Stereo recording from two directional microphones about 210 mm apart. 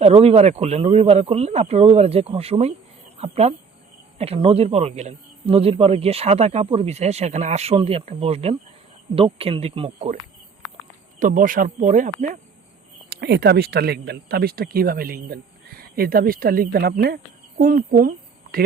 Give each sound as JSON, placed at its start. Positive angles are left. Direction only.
{"t": 0.0, "sound": "speech", "side_deg": -30}
{"t": 11.2, "sound": "speech", "side_deg": -40}
{"t": 13.1, "sound": "speech", "side_deg": -50}